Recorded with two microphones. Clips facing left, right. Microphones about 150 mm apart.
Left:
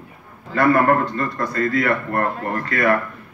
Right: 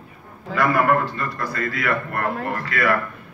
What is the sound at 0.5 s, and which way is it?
Speech, 55° left (ahead or behind).